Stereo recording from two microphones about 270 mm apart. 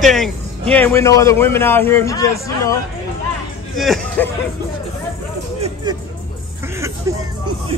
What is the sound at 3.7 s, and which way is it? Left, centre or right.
Hubbub, centre.